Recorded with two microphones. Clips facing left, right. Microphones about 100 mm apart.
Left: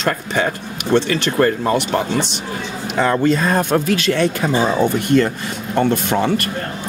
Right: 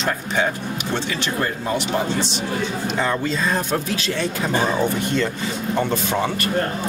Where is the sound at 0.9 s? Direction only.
65° left (ahead or behind).